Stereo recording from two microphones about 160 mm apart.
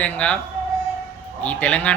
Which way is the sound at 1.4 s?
10° left (ahead or behind).